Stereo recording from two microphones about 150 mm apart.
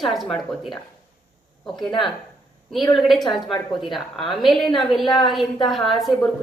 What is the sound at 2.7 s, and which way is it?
Speech, 5° left (ahead or behind).